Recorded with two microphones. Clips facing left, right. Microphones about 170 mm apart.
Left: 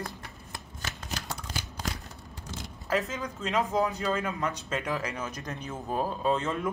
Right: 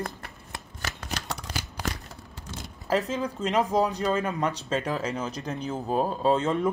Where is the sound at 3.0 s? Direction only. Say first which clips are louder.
Right 5 dB; 35° right (ahead or behind).